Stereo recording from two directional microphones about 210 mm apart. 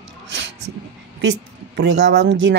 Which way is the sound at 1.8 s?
55° right (ahead or behind).